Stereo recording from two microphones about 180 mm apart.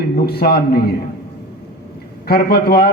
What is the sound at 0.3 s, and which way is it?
Speech, 60° left (ahead or behind).